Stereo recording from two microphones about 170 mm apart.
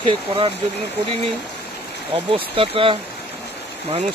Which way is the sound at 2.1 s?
30° right (ahead or behind).